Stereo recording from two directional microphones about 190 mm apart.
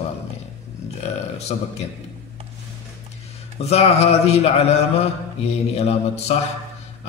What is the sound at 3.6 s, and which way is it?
Mantra, 35° left (ahead or behind).